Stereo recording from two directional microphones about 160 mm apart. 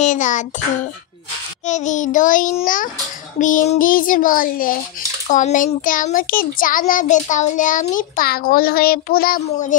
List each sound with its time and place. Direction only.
0.0 s child singing: 50° left (ahead or behind)
1.7 s child singing: 50° left (ahead or behind)
2.6 s a child's voice: 55° left (ahead or behind)